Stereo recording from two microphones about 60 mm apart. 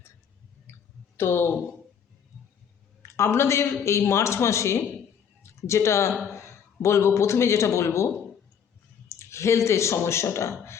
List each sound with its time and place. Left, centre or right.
0.7 s clicking: left
1.1 s speech: left
3.0 s a man's voice: left